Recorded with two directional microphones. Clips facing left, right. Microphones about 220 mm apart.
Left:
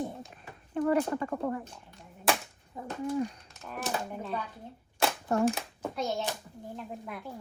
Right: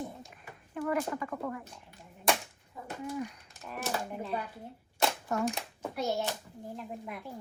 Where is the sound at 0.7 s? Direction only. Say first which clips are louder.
Left 5 dB; 35° left (ahead or behind).